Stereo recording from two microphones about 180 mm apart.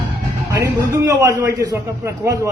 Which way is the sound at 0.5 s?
15° right (ahead or behind).